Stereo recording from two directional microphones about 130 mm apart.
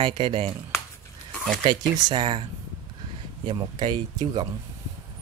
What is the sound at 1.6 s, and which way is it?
Speech, 35° right (ahead or behind).